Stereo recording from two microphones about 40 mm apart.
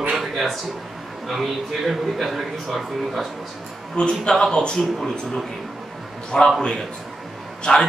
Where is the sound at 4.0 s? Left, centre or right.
Centre.